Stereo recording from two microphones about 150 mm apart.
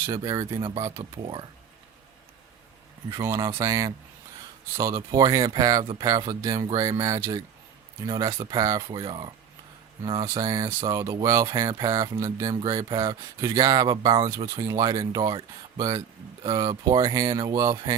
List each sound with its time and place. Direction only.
0.0 s speech: 25° right (ahead or behind)
3.1 s speech: 20° right (ahead or behind)
9.0 s speech: 35° right (ahead or behind)
10.2 s speech: 20° right (ahead or behind)
11.7 s speech: 35° right (ahead or behind)
12.2 s speech: 20° right (ahead or behind)